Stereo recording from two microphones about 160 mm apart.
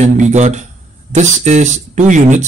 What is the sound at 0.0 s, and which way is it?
Speech, 50° right (ahead or behind).